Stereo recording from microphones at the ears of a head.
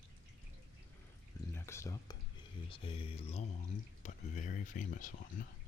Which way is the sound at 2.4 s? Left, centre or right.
Left.